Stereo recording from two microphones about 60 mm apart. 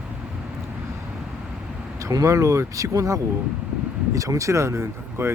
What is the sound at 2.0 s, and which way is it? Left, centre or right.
Speech, right.